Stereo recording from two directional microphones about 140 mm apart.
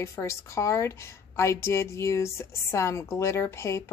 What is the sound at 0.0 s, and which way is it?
A woman's voice, 20° left (ahead or behind).